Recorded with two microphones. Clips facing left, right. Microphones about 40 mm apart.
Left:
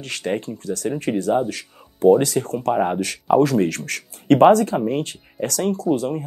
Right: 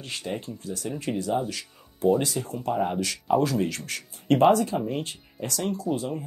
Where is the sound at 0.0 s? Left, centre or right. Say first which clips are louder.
Left 8 dB; left.